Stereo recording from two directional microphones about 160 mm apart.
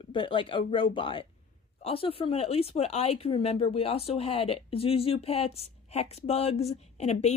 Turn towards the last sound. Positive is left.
turn(degrees=45)  # may be behind; listen again after turning